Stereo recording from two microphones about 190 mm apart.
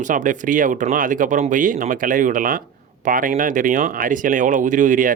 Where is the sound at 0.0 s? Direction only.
40° right (ahead or behind).